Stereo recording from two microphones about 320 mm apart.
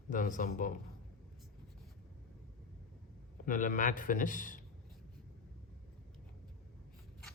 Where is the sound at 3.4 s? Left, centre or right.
Left.